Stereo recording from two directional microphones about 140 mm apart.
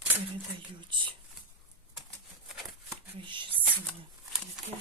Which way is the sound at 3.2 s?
35° right (ahead or behind).